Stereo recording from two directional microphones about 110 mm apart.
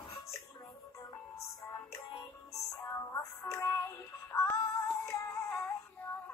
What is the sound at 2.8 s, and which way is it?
Music, 25° left (ahead or behind).